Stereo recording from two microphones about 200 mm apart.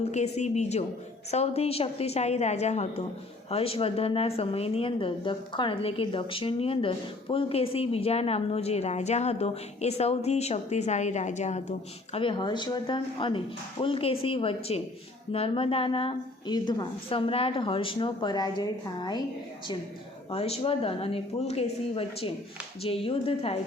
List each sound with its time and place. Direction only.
0.0 s a woman's voice: 35° left (ahead or behind)
12.1 s a woman's voice: 25° left (ahead or behind)
20.3 s a woman's voice: 30° left (ahead or behind)